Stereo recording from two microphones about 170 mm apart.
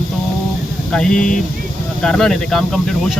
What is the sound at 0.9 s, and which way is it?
Speech, 5° left (ahead or behind).